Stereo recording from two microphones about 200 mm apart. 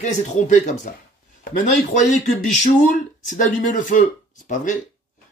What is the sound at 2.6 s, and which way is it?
A man's voice, 40° left (ahead or behind).